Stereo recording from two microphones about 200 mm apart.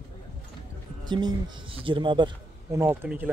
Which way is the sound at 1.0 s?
20° right (ahead or behind).